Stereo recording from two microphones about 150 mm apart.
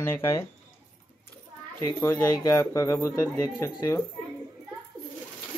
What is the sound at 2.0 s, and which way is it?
Speech, 20° left (ahead or behind).